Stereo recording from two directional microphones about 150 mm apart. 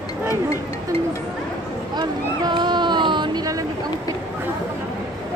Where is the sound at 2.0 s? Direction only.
30° right (ahead or behind).